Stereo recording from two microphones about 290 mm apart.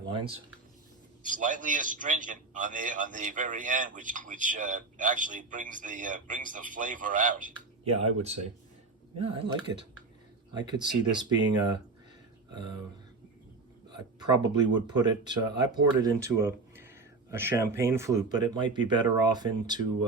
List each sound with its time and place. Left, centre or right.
0.0 s speech: centre
1.2 s a man's voice: right
9.4 s speech: centre
14.2 s speech: centre